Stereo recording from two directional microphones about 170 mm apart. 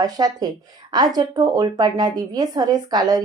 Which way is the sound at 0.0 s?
20° right (ahead or behind).